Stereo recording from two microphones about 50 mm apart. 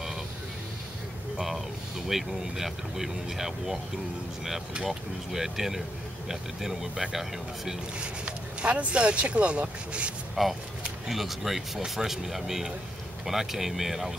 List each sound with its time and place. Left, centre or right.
1.4 s speech: centre
4.8 s speech: centre
8.0 s speech: right
10.4 s speech: centre